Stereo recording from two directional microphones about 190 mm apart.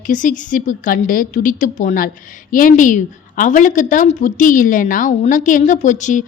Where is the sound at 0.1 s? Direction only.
45° left (ahead or behind).